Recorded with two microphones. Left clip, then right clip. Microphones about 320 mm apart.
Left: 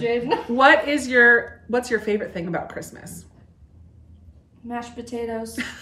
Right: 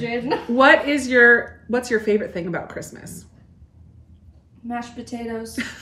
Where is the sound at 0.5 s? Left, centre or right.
Centre.